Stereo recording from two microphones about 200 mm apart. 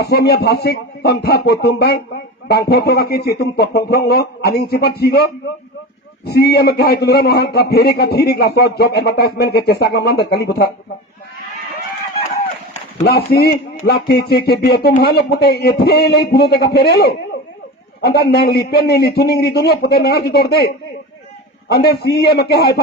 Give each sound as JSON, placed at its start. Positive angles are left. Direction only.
{"t": 0.0, "sound": "a man's voice", "side_deg": 55}
{"t": 13.1, "sound": "a man's voice", "side_deg": 55}